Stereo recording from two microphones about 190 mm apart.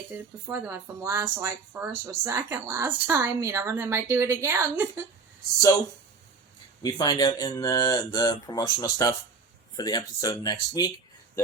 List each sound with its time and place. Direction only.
0.1 s speech: 10° right (ahead or behind)
6.8 s speech: 20° left (ahead or behind)